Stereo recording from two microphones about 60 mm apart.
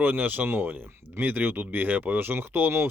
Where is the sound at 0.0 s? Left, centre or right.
Right.